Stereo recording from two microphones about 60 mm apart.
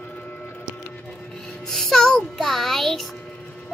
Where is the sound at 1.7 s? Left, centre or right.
Centre.